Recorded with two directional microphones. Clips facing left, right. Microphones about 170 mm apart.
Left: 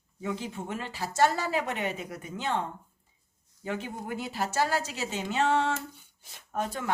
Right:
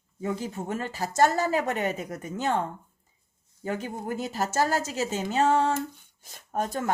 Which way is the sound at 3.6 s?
40° right (ahead or behind).